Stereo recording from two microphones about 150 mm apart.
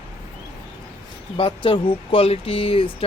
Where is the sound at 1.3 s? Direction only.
35° left (ahead or behind).